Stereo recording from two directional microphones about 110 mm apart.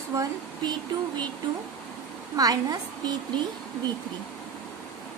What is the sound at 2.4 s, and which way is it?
Speech, 35° right (ahead or behind).